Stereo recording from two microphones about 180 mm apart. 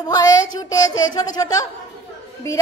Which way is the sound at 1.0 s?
20° left (ahead or behind).